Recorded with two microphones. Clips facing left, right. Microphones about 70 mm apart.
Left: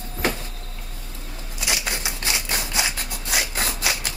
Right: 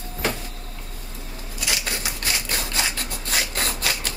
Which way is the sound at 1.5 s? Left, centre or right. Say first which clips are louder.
Left 1 dB; left.